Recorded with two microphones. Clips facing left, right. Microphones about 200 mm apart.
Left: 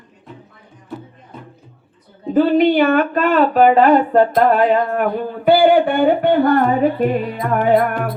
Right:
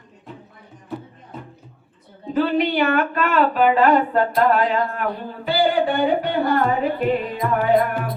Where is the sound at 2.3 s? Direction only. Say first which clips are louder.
Left 7 dB; 50° left (ahead or behind).